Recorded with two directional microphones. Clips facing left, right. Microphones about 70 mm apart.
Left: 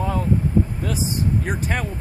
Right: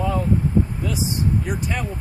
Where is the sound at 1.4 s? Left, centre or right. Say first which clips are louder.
Left 1 dB; left.